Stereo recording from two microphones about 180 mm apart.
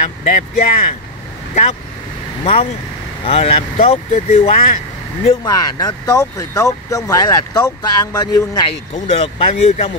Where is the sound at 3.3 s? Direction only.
30° left (ahead or behind).